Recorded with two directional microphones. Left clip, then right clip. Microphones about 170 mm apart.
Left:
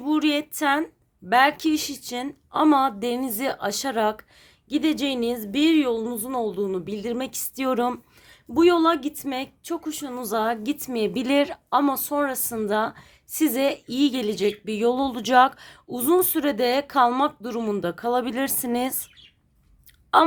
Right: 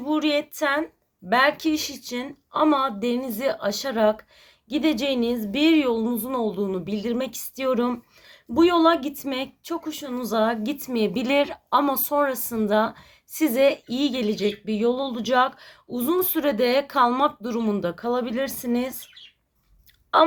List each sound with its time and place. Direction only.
0.0 s a woman's voice: 30° left (ahead or behind)
8.5 s speech: 25° left (ahead or behind)
20.1 s speech: 30° left (ahead or behind)